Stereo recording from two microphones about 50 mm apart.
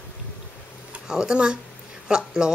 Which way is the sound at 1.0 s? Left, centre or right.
Centre.